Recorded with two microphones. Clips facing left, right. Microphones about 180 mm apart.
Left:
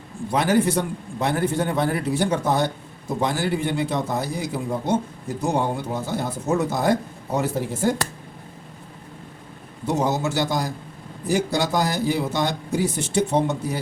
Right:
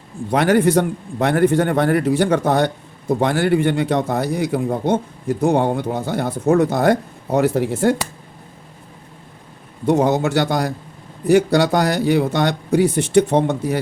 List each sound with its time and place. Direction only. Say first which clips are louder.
0.3 s a man's voice: right 5 dB; 65° right (ahead or behind)
9.9 s a man's voice: right 6 dB; 60° right (ahead or behind)